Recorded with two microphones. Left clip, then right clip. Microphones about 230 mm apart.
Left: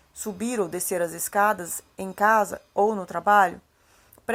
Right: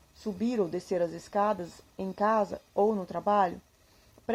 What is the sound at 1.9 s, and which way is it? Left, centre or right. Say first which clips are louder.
A woman's voice: left 7 dB; left.